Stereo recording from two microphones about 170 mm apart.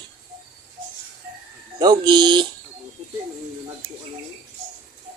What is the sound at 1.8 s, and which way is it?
Speech, 25° right (ahead or behind).